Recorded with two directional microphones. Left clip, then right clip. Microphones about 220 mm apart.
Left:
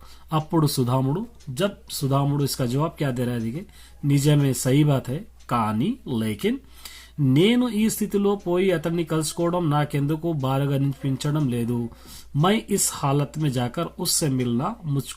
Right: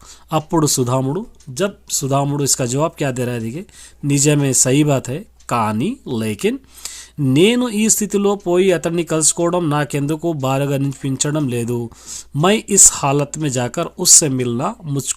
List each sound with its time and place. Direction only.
0.3 s speech: 40° right (ahead or behind)